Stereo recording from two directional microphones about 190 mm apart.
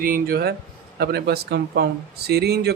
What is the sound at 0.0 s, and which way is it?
Speech, 50° right (ahead or behind).